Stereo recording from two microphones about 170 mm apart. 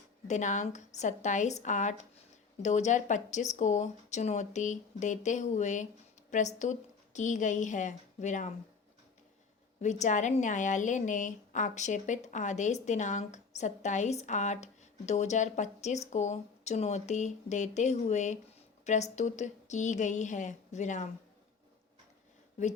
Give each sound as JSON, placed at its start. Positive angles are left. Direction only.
{"t": 0.3, "sound": "a woman's voice", "side_deg": 45}
{"t": 9.8, "sound": "a woman's voice", "side_deg": 45}